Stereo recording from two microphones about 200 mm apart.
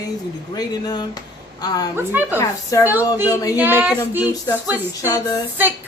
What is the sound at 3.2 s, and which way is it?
Speech, 15° left (ahead or behind).